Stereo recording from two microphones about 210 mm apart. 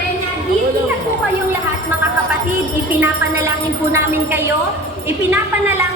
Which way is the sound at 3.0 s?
15° right (ahead or behind).